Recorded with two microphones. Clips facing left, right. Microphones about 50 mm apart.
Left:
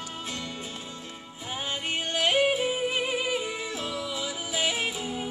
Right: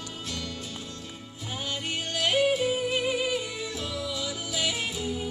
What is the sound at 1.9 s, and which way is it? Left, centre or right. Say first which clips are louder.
Yodeling: left 2 dB; left.